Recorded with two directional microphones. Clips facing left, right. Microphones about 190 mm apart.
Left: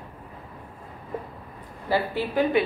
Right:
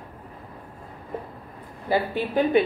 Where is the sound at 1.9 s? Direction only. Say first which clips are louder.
Right 1 dB; 20° right (ahead or behind).